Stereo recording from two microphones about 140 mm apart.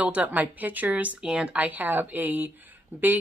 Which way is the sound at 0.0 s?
10° right (ahead or behind).